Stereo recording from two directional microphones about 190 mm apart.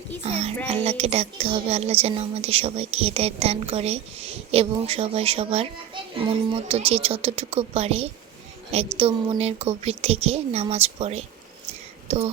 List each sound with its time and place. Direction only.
0.2 s speech: 35° right (ahead or behind)